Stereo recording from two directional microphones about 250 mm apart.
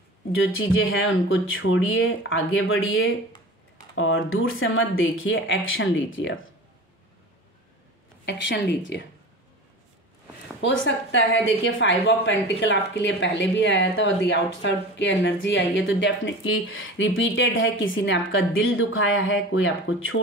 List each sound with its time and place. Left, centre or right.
0.4 s a woman's voice: left
8.3 s a woman's voice: left
10.6 s a woman's voice: left